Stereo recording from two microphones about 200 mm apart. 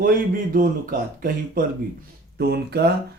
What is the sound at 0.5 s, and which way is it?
Speech, 45° right (ahead or behind).